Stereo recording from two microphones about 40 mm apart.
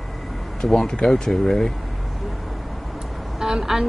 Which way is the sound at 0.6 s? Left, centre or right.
Centre.